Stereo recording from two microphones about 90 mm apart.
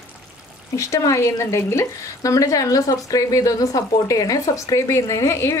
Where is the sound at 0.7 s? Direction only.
35° left (ahead or behind).